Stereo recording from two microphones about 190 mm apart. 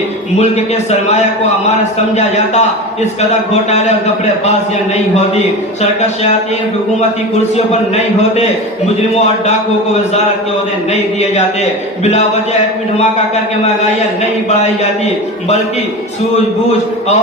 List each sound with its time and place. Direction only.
0.3 s a man's voice: 35° left (ahead or behind)
5.8 s a man's voice: 35° left (ahead or behind)
7.5 s a man's voice: 35° left (ahead or behind)
10.9 s a man's voice: 35° left (ahead or behind)